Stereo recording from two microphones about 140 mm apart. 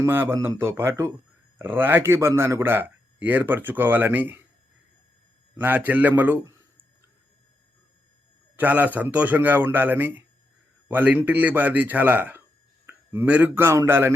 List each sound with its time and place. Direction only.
0.0 s a man's voice: 15° right (ahead or behind)
5.5 s a man's voice: 15° right (ahead or behind)
8.5 s a man's voice: 10° right (ahead or behind)